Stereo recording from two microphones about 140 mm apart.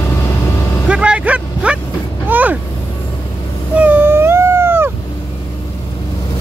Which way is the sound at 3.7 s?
10° right (ahead or behind).